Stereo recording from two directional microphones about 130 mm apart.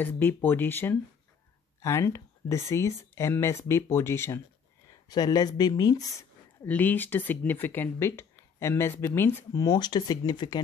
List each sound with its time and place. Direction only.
0.0 s speech: 15° left (ahead or behind)
6.6 s speech: 15° left (ahead or behind); by 10.6 s 35° left (ahead or behind)